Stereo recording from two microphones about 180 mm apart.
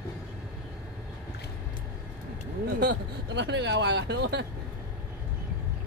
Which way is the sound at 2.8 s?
75° right (ahead or behind).